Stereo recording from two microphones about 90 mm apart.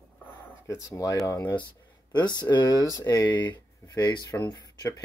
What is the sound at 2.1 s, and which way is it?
Speech, 55° left (ahead or behind).